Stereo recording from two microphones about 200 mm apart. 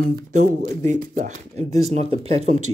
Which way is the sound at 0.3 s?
35° right (ahead or behind).